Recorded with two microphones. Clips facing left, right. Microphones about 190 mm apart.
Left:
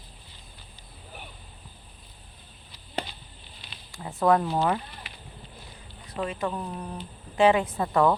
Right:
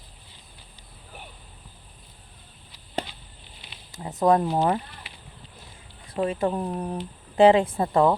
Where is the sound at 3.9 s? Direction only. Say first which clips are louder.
Right 2 dB; 20° right (ahead or behind).